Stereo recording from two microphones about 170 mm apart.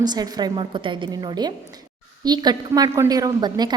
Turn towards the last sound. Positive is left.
turn(degrees=-25)  # may be behind; listen again after turning